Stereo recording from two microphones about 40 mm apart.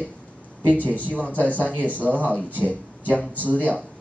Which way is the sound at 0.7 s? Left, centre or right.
Left.